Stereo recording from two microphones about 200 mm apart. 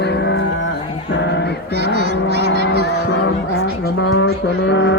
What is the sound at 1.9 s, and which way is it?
Speech, 55° right (ahead or behind).